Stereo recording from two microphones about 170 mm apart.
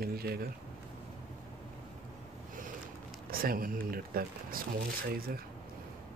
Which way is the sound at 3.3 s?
60° right (ahead or behind).